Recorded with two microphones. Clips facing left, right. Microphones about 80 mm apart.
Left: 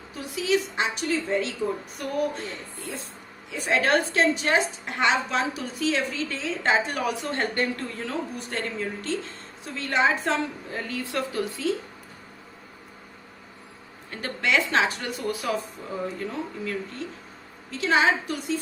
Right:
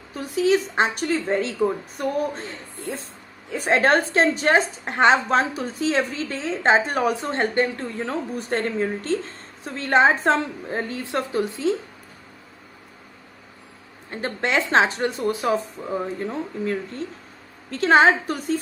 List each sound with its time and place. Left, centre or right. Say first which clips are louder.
0.1 s a woman's voice: right 5 dB; right
7.3 s speech: right 4 dB; right
8.4 s a woman's voice: right 7 dB; right
14.1 s a woman's voice: right 2 dB; right
17.7 s a woman's voice: right 6 dB; right